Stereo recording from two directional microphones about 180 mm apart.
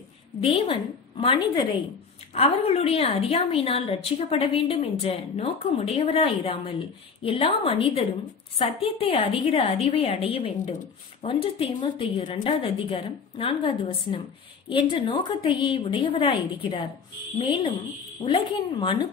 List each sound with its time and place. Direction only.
0.4 s a woman's voice: 30° left (ahead or behind)
18.2 s a woman's voice: 30° left (ahead or behind)